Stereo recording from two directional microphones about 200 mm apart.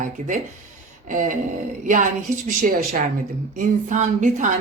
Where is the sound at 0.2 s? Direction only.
35° right (ahead or behind).